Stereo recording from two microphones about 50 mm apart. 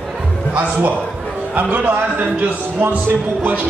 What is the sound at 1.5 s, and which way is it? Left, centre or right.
A man's voice, right.